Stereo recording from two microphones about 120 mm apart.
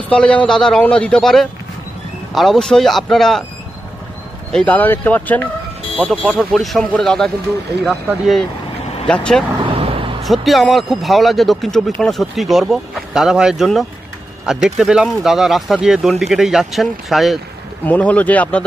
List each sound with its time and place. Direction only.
0.1 s a man's voice: 10° left (ahead or behind)
4.5 s a man's voice: 10° left (ahead or behind)
9.6 s vehicle: 50° right (ahead or behind)
10.2 s speech: centre (ahead or behind)
17.8 s a man's voice: 10° left (ahead or behind)